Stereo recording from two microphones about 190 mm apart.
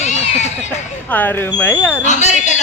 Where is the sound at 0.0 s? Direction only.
35° left (ahead or behind).